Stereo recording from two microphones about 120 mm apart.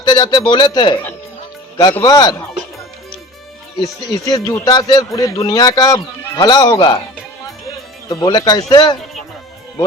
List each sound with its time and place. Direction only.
0.0 s speech: 40° left (ahead or behind)
4.1 s speech: 30° left (ahead or behind)
8.1 s speech: 35° left (ahead or behind)